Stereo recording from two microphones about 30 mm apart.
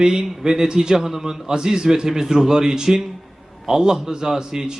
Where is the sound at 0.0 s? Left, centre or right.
Right.